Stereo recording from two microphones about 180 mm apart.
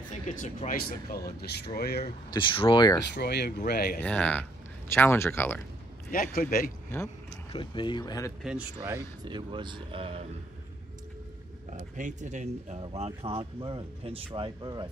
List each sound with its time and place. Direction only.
0.1 s speech: 45° left (ahead or behind); by 2.0 s 60° left (ahead or behind)
2.3 s speech: 30° left (ahead or behind)
3.2 s speech: 65° left (ahead or behind)
4.0 s speech: 5° left (ahead or behind)
6.1 s speech: 50° left (ahead or behind)
7.5 s speech: 25° left (ahead or behind)
8.4 s speech: 5° right (ahead or behind)
9.2 s speech: 25° right (ahead or behind)
11.7 s speech: 40° right (ahead or behind); by 14.9 s 25° right (ahead or behind)